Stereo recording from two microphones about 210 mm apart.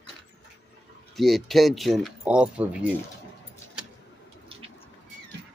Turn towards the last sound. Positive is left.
turn(degrees=-25)  # may be behind; listen again after turning